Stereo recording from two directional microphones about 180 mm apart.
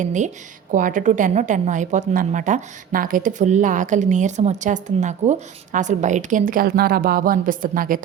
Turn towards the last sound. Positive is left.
turn(degrees=-50)  # may be behind; listen again after turning